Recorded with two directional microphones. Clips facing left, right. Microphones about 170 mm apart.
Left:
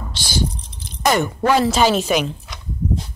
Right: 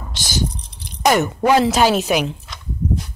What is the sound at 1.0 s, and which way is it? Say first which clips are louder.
Speech: right 2 dB; 10° right (ahead or behind).